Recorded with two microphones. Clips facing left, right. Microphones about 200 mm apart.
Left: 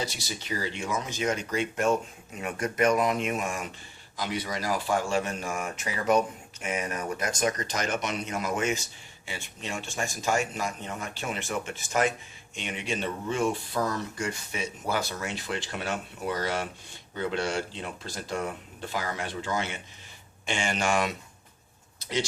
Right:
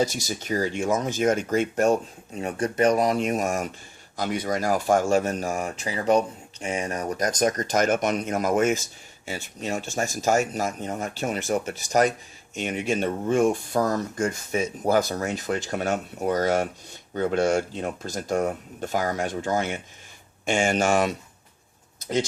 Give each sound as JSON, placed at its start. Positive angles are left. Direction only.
{"t": 0.0, "sound": "speech", "side_deg": -45}